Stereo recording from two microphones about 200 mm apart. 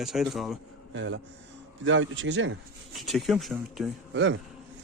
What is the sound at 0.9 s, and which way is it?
Speech, 65° right (ahead or behind).